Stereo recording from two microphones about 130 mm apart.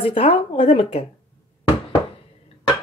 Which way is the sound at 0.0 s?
45° left (ahead or behind).